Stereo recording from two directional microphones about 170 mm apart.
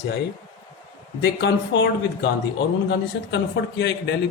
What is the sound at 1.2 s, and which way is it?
A man's voice, 90° left.